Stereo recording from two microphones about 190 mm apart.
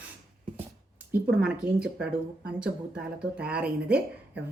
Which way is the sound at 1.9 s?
60° right (ahead or behind).